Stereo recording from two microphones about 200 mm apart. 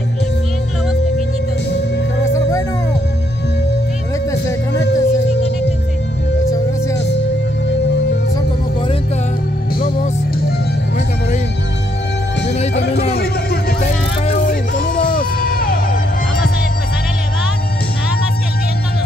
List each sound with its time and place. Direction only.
4.3 s music: 15° left (ahead or behind)
4.8 s music: 55° left (ahead or behind)
6.4 s music: 15° left (ahead or behind)
9.8 s music: 45° left (ahead or behind)
12.7 s music: 55° left (ahead or behind)
13.7 s a sound: 35° left (ahead or behind)